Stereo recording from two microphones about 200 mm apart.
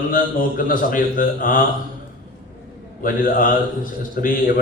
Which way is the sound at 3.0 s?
45° left (ahead or behind).